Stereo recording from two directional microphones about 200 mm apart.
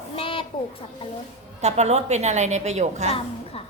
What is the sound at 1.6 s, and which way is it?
A woman's voice, 35° right (ahead or behind).